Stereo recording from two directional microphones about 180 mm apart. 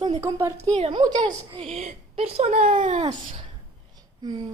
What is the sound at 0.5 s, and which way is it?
A woman's voice, 35° right (ahead or behind).